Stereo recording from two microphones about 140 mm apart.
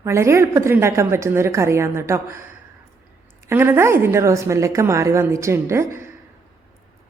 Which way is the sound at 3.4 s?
15° right (ahead or behind).